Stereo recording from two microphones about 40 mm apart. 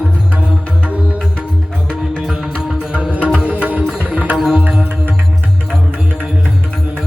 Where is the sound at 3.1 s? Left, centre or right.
Right.